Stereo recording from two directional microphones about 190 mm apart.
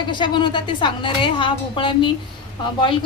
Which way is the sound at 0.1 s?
25° left (ahead or behind).